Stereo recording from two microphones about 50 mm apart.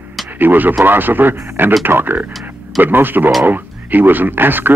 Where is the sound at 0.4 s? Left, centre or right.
Right.